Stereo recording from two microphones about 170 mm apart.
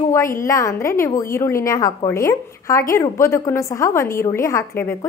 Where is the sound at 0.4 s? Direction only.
20° left (ahead or behind).